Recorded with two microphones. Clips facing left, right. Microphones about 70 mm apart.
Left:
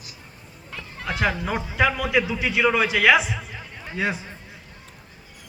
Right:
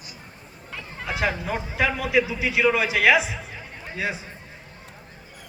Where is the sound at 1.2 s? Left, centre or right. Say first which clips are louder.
Left 2 dB; left.